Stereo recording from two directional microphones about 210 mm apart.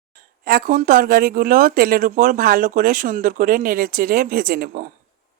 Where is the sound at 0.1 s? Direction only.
45° right (ahead or behind).